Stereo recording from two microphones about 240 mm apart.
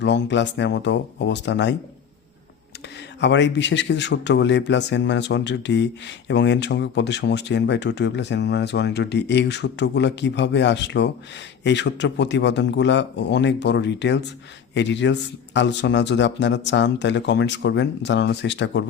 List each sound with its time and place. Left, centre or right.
0.0 s speech: left
3.2 s speech: left